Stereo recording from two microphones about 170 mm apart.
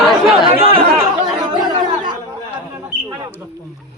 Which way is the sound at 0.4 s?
35° right (ahead or behind).